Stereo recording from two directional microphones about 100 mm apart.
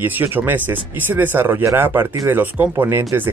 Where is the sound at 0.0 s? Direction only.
20° right (ahead or behind).